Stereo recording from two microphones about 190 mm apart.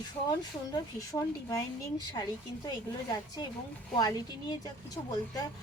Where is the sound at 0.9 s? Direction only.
15° left (ahead or behind).